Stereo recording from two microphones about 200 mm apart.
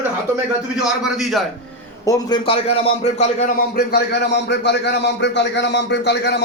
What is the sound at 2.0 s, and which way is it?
A man's voice, 20° left (ahead or behind).